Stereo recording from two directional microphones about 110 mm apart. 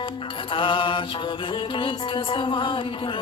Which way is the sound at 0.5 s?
50° left (ahead or behind).